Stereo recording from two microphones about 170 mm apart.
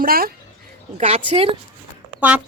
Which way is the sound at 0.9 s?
35° right (ahead or behind).